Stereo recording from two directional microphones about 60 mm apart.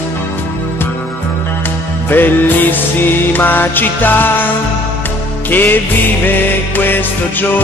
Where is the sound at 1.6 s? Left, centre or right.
Left.